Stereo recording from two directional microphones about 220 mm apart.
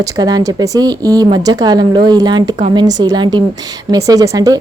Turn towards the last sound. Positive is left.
turn(degrees=-15)  # may be behind; listen again after turning